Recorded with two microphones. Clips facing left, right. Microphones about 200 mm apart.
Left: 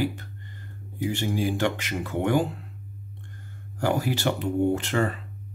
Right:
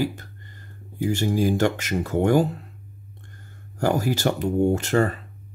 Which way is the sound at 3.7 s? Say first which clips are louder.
Right 3 dB; 45° right (ahead or behind).